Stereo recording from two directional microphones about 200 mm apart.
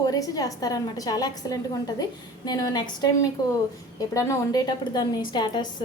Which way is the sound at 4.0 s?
15° left (ahead or behind).